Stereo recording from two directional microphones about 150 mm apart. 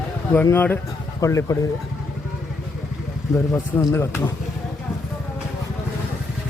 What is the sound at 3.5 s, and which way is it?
Speech, 15° left (ahead or behind).